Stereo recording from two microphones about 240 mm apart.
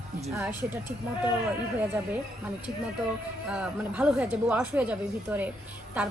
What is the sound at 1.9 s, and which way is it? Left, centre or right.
Speech, centre.